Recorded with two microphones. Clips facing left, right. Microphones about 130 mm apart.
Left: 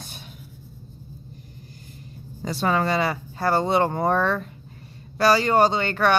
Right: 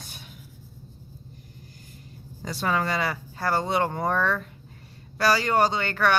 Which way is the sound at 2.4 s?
30° left (ahead or behind).